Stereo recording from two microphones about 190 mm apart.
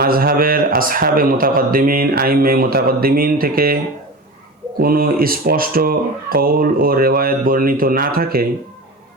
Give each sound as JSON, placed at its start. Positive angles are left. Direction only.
{"t": 0.0, "sound": "speech", "side_deg": -50}
{"t": 4.8, "sound": "speech", "side_deg": -50}